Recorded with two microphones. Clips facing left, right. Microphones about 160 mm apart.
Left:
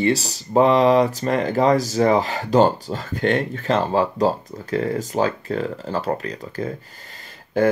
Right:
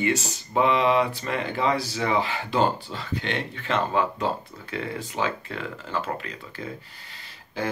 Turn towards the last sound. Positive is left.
turn(degrees=50)  # may be behind; listen again after turning